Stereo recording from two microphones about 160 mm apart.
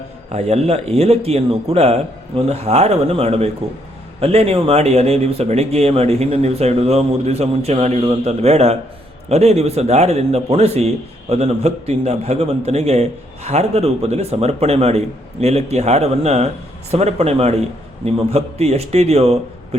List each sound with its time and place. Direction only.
0.3 s a man's voice: 40° right (ahead or behind)